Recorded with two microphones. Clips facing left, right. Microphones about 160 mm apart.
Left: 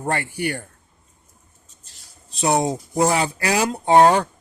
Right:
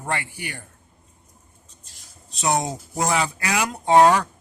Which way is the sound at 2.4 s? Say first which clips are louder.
Left 4 dB; 30° left (ahead or behind).